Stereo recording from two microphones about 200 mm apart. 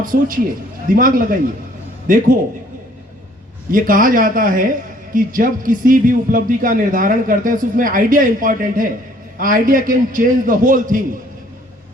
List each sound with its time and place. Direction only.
0.0 s a man's voice: 45° right (ahead or behind)
3.7 s a man's voice: 45° right (ahead or behind)